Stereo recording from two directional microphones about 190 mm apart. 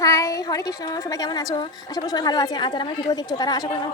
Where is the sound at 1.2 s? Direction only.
20° left (ahead or behind).